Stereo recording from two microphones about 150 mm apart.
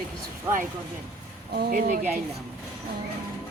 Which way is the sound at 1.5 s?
85° right.